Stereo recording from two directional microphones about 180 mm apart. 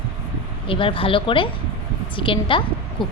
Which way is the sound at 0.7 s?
30° left (ahead or behind).